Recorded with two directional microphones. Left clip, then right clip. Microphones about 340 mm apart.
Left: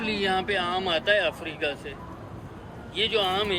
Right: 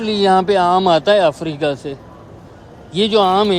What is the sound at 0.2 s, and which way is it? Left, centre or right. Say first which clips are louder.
Speech: right 15 dB; right.